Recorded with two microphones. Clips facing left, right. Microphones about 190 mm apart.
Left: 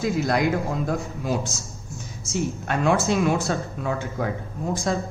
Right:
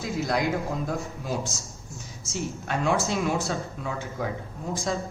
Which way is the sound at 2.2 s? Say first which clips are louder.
Left 6 dB; 55° left (ahead or behind).